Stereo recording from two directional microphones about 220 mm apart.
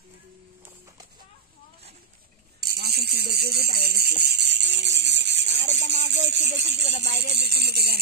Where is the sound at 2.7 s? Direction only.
45° right (ahead or behind).